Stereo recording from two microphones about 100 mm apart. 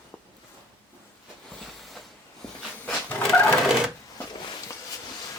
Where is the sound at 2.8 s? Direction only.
20° left (ahead or behind).